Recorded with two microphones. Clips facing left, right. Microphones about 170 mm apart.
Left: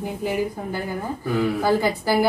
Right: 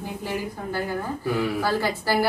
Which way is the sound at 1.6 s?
15° left (ahead or behind).